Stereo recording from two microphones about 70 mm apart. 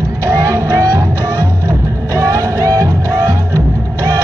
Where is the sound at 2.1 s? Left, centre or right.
Right.